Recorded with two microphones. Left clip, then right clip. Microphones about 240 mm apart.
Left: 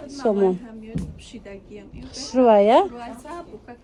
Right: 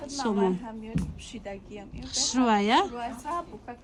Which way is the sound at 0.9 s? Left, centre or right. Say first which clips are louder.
Left 2 dB; centre.